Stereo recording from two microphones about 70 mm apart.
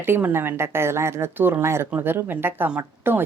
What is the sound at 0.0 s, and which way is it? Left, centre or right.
A woman's voice, right.